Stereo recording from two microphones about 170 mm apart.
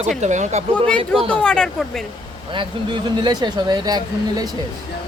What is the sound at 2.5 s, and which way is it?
Speech, 30° right (ahead or behind).